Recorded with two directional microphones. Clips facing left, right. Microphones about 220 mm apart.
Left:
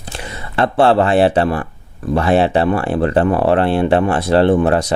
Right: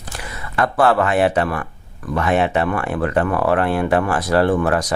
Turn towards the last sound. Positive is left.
turn(degrees=25)  # may be behind; listen again after turning